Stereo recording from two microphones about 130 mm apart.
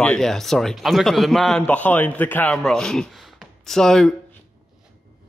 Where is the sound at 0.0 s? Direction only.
5° left (ahead or behind).